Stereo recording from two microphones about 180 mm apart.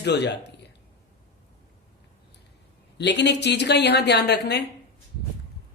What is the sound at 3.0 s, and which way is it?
A woman's voice, 70° left (ahead or behind).